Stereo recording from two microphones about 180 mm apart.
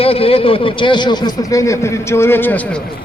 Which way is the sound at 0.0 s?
30° left (ahead or behind).